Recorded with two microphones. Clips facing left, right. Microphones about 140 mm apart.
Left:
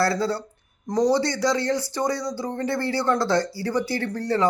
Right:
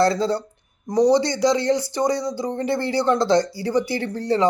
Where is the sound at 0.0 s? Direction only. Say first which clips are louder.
Right 4 dB; 20° right (ahead or behind).